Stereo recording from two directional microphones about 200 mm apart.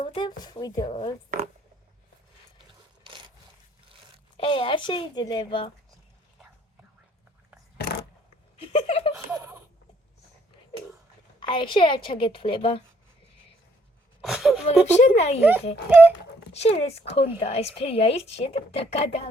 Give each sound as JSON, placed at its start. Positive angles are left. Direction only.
{"t": 0.0, "sound": "speech", "side_deg": 25}
{"t": 3.0, "sound": "rub", "side_deg": -25}
{"t": 4.4, "sound": "speech", "side_deg": 25}
{"t": 7.8, "sound": "a sound", "side_deg": 55}
{"t": 8.5, "sound": "a sound", "side_deg": 30}
{"t": 9.1, "sound": "giggle", "side_deg": -15}
{"t": 11.3, "sound": "speech", "side_deg": 25}
{"t": 14.2, "sound": "speech", "side_deg": 0}
{"t": 14.9, "sound": "speech", "side_deg": 35}
{"t": 15.4, "sound": "speech", "side_deg": -10}
{"t": 16.5, "sound": "speech", "side_deg": 30}